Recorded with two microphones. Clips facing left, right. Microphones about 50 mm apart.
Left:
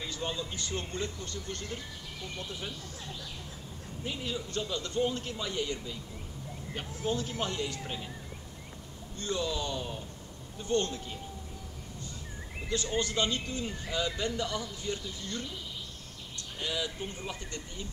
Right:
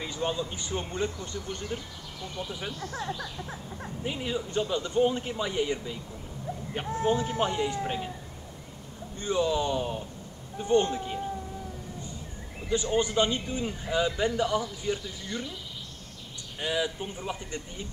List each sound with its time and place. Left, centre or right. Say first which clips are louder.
0.0 s speech: right 5 dB; centre
2.8 s speech: right 9 dB; right
4.0 s speech: right 4 dB; right
9.2 s speech: right 6 dB; right
12.6 s speech: right 5 dB; centre
16.5 s speech: right 5 dB; centre